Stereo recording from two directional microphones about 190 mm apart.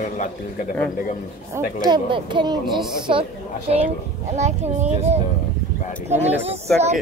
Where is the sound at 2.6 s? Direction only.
Centre (ahead or behind).